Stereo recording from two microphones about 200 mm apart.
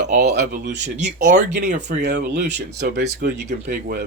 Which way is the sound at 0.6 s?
55° right (ahead or behind).